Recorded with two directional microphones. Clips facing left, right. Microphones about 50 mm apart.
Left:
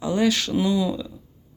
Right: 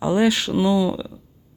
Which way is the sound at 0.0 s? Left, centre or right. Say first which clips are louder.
Right 3 dB; right.